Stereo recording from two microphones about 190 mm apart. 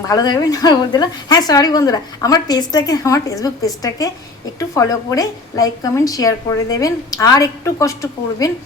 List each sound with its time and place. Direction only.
0.1 s a woman's voice: 20° left (ahead or behind)